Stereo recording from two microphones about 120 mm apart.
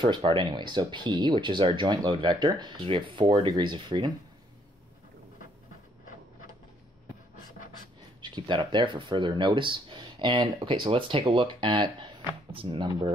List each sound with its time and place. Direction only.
0.4 s speech: 40° right (ahead or behind)
8.2 s speech: 40° right (ahead or behind)